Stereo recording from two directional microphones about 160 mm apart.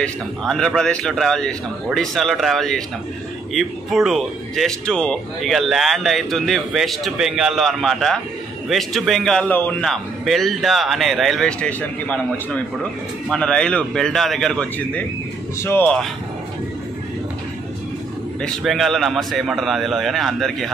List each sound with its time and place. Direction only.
0.0 s speech: 5° left (ahead or behind)
18.4 s speech: centre (ahead or behind)